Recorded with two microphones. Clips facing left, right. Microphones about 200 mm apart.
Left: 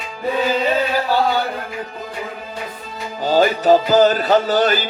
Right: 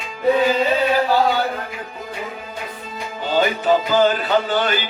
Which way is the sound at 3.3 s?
40° left (ahead or behind).